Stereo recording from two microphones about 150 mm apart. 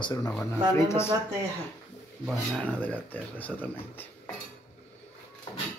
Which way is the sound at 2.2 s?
Centre (ahead or behind).